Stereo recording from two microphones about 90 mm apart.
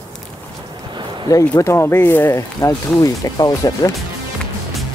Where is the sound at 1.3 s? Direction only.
35° left (ahead or behind).